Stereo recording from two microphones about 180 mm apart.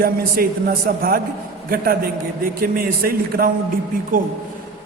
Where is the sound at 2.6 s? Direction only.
55° right (ahead or behind).